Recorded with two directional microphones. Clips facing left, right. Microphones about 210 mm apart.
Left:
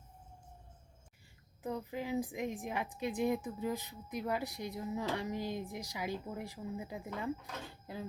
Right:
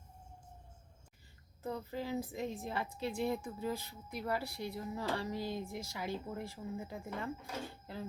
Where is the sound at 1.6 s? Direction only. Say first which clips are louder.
Left 1 dB; 15° left (ahead or behind).